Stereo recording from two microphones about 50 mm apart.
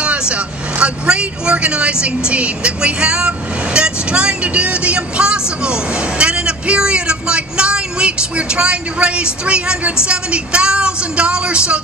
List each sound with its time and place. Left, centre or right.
0.0 s a woman's voice: right